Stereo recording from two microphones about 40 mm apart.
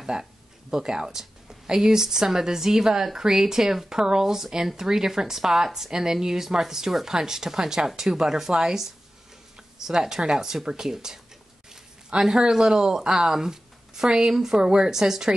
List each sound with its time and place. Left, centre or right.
0.0 s speech: centre
12.2 s speech: centre